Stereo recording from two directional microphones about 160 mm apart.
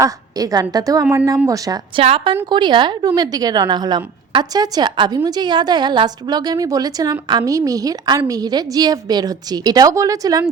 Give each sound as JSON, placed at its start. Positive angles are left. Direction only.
{"t": 0.0, "sound": "a woman's voice", "side_deg": -20}
{"t": 2.0, "sound": "a woman's voice", "side_deg": -35}